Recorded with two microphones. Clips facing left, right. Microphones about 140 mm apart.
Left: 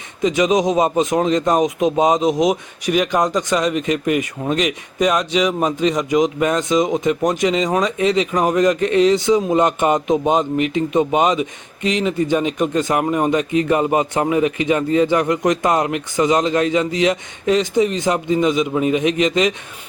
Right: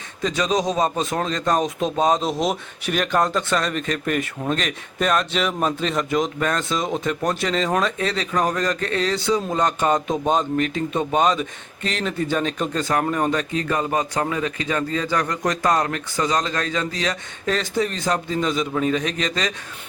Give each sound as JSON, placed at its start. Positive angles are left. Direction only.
{"t": 0.2, "sound": "speech", "side_deg": 20}